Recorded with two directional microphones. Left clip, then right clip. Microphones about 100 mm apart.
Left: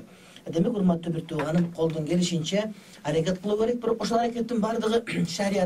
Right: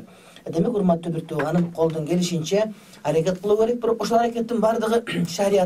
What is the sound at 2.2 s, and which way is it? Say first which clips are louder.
Speech: right 2 dB; 40° right (ahead or behind).